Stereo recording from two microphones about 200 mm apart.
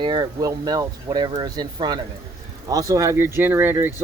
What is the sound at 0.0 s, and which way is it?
Speech, 25° right (ahead or behind).